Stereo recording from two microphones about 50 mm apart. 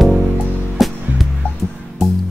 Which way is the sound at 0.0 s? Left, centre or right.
Centre.